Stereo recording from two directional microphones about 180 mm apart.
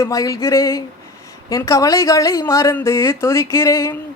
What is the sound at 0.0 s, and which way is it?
Speech, 20° left (ahead or behind).